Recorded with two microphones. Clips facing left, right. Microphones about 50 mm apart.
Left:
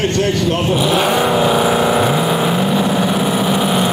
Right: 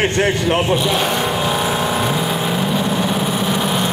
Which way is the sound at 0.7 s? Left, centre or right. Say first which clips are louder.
Left 3 dB; centre.